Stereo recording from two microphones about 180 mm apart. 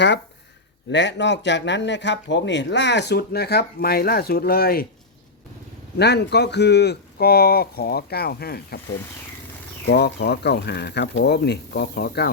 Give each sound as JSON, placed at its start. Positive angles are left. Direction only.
{"t": 0.9, "sound": "speech", "side_deg": 80}
{"t": 6.0, "sound": "speech", "side_deg": 65}
{"t": 9.8, "sound": "speech", "side_deg": 65}